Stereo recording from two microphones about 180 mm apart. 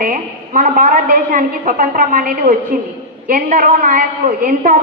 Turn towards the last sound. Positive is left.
turn(degrees=-50)  # may be behind; listen again after turning